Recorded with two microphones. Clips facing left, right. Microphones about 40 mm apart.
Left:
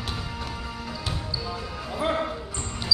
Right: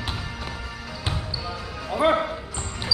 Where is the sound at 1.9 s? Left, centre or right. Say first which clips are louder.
Right 6 dB; right.